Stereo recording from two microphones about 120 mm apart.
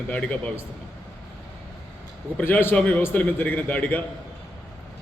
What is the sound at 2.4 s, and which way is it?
A man's voice, 20° left (ahead or behind).